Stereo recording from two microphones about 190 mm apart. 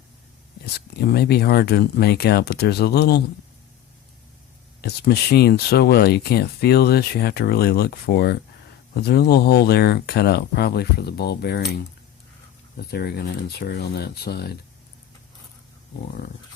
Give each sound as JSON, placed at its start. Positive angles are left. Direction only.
{"t": 0.6, "sound": "speech", "side_deg": 55}
{"t": 4.8, "sound": "speech", "side_deg": 55}
{"t": 12.9, "sound": "speech", "side_deg": 55}